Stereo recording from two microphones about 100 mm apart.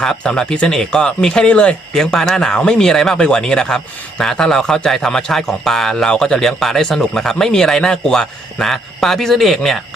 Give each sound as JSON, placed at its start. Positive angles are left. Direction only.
{"t": 0.0, "sound": "a man's voice", "side_deg": 5}